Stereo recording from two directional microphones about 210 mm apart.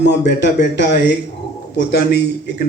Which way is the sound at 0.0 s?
55° left (ahead or behind).